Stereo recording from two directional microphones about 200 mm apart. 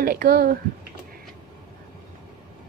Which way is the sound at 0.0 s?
50° right (ahead or behind).